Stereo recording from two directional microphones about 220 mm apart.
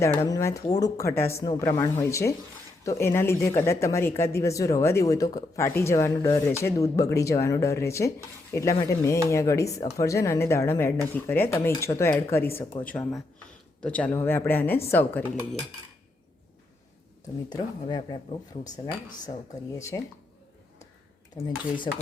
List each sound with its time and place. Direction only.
0.0 s speech: 15° left (ahead or behind)
17.5 s speech: 20° left (ahead or behind)
21.9 s speech: 25° left (ahead or behind)